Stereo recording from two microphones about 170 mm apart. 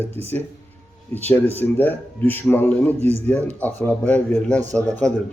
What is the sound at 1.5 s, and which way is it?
Speech, 10° left (ahead or behind).